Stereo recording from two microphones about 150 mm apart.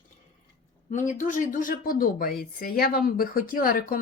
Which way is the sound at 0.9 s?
55° left (ahead or behind).